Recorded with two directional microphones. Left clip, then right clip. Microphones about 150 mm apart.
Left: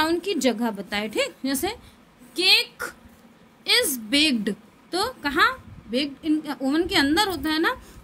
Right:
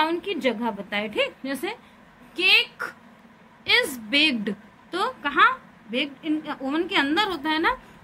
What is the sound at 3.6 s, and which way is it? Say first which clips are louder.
A woman's voice: even; 65° left (ahead or behind).